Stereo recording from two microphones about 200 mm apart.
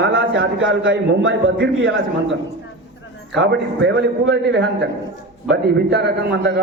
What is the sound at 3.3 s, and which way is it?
A man's voice, 60° right (ahead or behind).